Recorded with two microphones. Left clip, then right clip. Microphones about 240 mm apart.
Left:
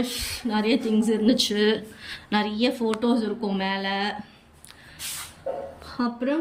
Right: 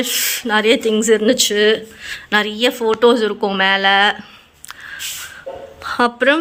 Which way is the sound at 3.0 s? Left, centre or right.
Right.